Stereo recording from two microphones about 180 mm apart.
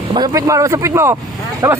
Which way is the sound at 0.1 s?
20° right (ahead or behind).